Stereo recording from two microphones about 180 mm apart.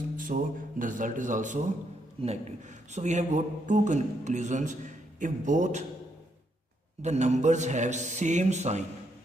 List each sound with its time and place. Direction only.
0.2 s a man's voice: 50° right (ahead or behind)
7.0 s a man's voice: 40° right (ahead or behind)